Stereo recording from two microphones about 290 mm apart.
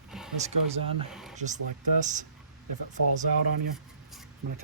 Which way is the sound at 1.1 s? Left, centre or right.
Centre.